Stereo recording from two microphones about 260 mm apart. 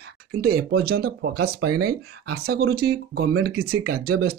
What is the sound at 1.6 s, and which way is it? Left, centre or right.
Speech, right.